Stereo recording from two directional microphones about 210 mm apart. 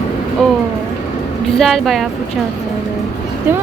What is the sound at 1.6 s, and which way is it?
Speech, centre (ahead or behind).